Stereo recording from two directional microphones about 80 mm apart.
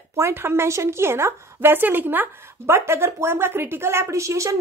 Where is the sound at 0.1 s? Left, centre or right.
Right.